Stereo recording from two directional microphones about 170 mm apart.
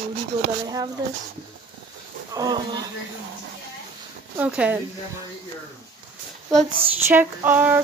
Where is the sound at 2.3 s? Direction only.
25° right (ahead or behind).